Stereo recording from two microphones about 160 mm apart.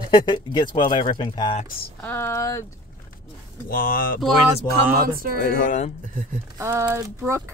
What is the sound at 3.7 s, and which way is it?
Speech, 60° left (ahead or behind).